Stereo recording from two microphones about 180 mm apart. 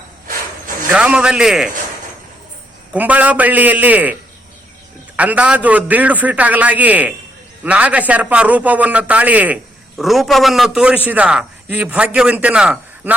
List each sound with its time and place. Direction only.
0.9 s a man's voice: 5° right (ahead or behind)
2.9 s a man's voice: 10° right (ahead or behind)